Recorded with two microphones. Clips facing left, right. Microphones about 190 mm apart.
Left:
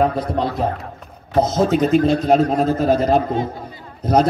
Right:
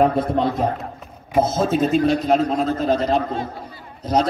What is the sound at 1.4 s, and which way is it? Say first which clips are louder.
Speech: left 2 dB; 15° left (ahead or behind).